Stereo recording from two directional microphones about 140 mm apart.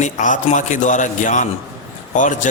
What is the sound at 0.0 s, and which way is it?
A man's voice, 60° left (ahead or behind).